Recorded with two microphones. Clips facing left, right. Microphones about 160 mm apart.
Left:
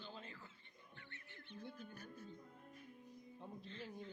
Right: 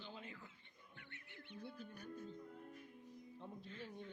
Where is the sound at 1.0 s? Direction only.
15° right (ahead or behind).